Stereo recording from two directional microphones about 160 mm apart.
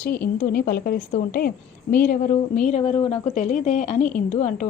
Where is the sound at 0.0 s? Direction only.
65° left (ahead or behind).